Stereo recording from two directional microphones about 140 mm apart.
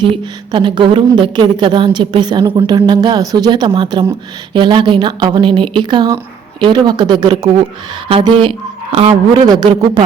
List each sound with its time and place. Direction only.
0.0 s a woman's voice: 35° right (ahead or behind)